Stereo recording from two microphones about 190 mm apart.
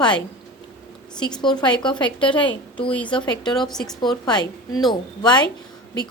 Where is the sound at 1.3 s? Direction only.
25° left (ahead or behind).